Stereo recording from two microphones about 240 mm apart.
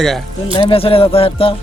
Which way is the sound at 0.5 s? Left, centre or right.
Left.